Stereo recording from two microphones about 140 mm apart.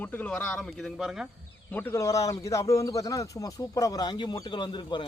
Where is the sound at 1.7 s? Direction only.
15° left (ahead or behind).